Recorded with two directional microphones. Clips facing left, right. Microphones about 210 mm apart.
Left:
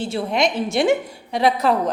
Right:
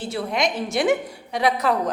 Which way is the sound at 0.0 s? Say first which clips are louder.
Left 3 dB; 25° left (ahead or behind).